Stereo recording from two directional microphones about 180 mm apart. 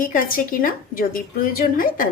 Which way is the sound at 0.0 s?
50° left (ahead or behind).